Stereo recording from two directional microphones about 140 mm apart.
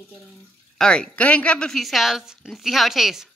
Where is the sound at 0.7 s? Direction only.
5° left (ahead or behind).